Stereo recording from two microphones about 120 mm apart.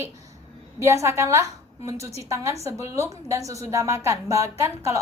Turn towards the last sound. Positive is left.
turn(degrees=-25)  # may be behind; listen again after turning